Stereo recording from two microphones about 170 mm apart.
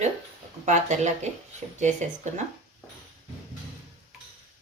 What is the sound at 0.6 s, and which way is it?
Speech, 45° right (ahead or behind).